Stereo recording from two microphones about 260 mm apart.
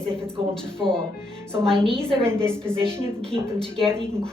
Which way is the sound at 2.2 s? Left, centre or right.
Centre.